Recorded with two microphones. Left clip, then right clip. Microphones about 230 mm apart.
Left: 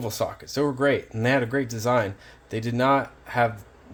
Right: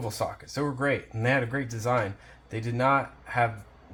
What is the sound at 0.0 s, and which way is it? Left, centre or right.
Speech, left.